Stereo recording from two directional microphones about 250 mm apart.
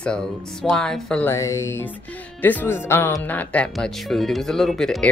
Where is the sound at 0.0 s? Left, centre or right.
Centre.